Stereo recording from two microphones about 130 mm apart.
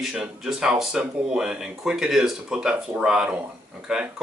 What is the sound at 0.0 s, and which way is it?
Speech, 5° right (ahead or behind).